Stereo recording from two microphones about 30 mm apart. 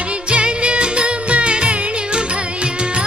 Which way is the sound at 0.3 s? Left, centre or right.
Right.